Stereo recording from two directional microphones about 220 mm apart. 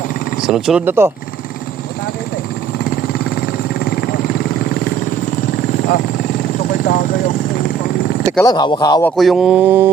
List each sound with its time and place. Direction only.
0.4 s speech: centre (ahead or behind)
3.2 s vehicle: 45° left (ahead or behind)
6.7 s a sound: 40° left (ahead or behind)
8.4 s speech: 20° left (ahead or behind)
9.0 s speech: centre (ahead or behind)